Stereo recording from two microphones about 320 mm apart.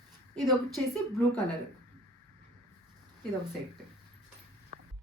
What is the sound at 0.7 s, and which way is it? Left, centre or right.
Speech, centre.